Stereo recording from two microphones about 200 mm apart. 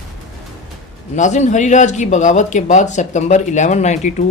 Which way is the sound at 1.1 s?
35° left (ahead or behind).